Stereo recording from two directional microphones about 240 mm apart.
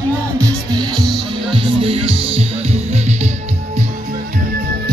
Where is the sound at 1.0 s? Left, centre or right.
Centre.